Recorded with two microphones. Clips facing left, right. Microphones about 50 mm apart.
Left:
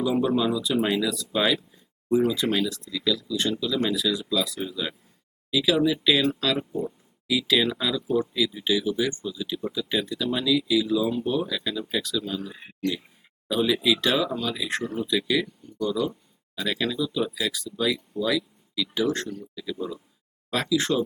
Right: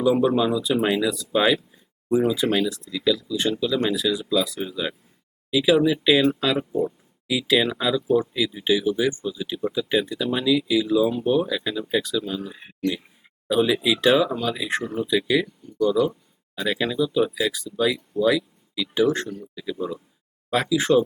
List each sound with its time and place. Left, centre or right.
0.0 s speech: centre
4.7 s speech: centre
12.5 s speech: right
13.5 s speech: centre